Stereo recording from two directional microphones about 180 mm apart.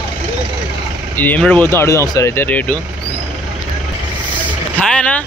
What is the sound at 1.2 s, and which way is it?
Speech, 10° left (ahead or behind).